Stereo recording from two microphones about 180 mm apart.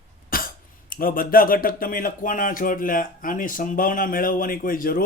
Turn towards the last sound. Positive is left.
turn(degrees=50)  # may be behind; listen again after turning